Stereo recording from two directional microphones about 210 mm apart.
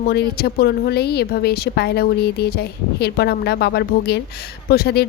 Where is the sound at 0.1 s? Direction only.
50° left (ahead or behind).